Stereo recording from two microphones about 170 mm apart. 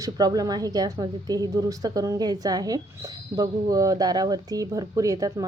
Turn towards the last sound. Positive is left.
turn(degrees=-20)  # may be behind; listen again after turning